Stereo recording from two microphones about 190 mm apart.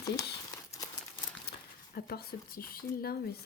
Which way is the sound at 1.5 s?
55° left (ahead or behind).